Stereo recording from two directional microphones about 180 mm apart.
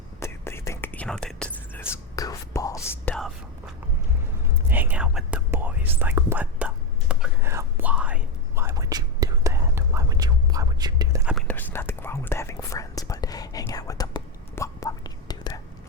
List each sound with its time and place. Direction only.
0.2 s whispering: 15° left (ahead or behind)
4.7 s whispering: 10° right (ahead or behind)
11.4 s whispering: 10° left (ahead or behind)